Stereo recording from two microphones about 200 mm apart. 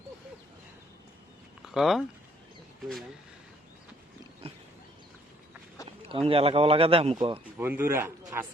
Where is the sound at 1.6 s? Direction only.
Centre (ahead or behind).